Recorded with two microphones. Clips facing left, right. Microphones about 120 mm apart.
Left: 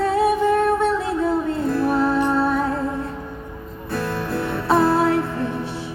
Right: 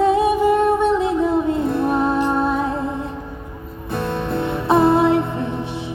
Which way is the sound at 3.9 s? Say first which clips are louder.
Right 2 dB; 20° right (ahead or behind).